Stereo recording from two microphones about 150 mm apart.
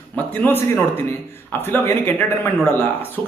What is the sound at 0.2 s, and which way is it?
A man's voice, 15° left (ahead or behind).